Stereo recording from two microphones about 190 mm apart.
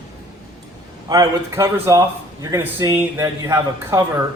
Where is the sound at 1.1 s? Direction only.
15° right (ahead or behind).